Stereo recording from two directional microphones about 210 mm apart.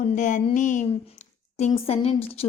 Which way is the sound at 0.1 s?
35° left (ahead or behind).